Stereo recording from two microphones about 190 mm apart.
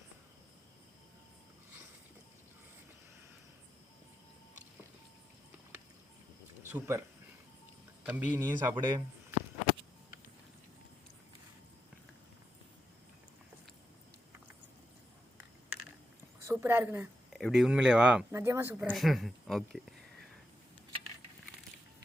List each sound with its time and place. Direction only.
6.6 s speech: 10° right (ahead or behind)
8.0 s speech: 10° right (ahead or behind)
8.7 s speech: 20° right (ahead or behind)
16.4 s a sound: 15° right (ahead or behind)
17.4 s speech: centre (ahead or behind)
18.8 s speech: centre (ahead or behind)